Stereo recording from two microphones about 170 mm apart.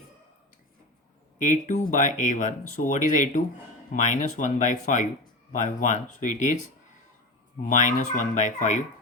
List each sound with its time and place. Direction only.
1.4 s speech: 45° left (ahead or behind)
7.6 s speech: 45° left (ahead or behind)